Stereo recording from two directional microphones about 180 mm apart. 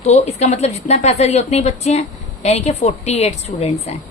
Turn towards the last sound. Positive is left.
turn(degrees=35)  # may be behind; listen again after turning